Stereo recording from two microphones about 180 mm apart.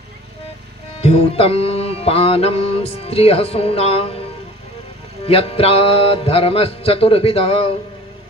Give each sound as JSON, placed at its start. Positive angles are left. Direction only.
{"t": 1.0, "sound": "music", "side_deg": 35}
{"t": 5.2, "sound": "music", "side_deg": 30}